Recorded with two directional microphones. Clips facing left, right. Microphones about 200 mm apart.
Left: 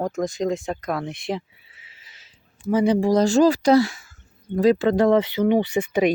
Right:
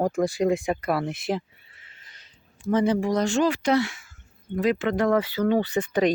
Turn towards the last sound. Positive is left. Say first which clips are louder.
# left 2 dB
turn(degrees=10)  # may be behind; listen again after turning